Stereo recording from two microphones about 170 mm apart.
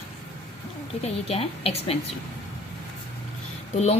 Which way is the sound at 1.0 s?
35° left (ahead or behind).